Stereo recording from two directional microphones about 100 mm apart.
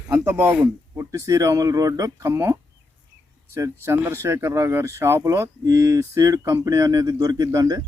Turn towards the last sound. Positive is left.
turn(degrees=-35)  # may be behind; listen again after turning